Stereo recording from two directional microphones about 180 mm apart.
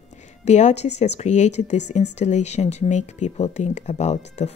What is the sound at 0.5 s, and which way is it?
Speech, 40° left (ahead or behind).